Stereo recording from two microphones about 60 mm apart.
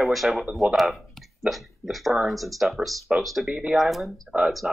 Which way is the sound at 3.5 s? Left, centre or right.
Centre.